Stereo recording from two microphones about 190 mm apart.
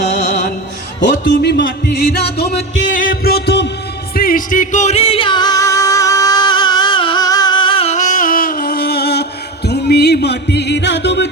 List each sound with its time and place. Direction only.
0.1 s music: 40° left (ahead or behind)
1.0 s music: 70° left (ahead or behind)
3.1 s a sound: 55° left (ahead or behind)
4.1 s music: 50° left (ahead or behind); by 11.3 s 65° left (ahead or behind)